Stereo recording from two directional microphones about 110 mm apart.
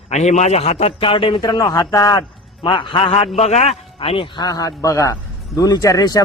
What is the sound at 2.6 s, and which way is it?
A man's voice, 50° left (ahead or behind).